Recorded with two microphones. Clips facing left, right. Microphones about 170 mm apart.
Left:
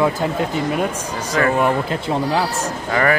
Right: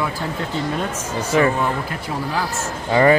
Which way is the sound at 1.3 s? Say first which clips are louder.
Right 2 dB; 20° right (ahead or behind).